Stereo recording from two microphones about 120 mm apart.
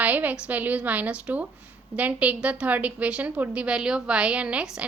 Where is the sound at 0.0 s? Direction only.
15° right (ahead or behind).